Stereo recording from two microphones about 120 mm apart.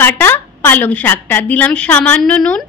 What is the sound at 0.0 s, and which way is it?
A woman's voice, 20° left (ahead or behind).